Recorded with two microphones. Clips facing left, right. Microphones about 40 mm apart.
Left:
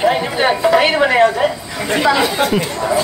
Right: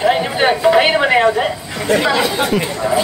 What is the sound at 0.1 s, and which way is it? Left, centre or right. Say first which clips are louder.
Chatter: right 1 dB; centre.